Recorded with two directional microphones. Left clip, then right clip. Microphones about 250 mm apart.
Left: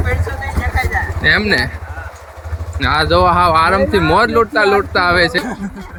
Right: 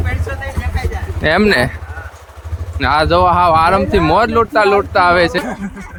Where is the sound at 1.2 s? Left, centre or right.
Centre.